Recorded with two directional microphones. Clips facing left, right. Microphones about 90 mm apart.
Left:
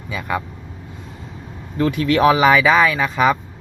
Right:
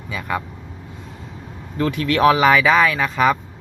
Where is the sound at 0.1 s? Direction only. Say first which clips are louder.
Left 1 dB; 5° left (ahead or behind).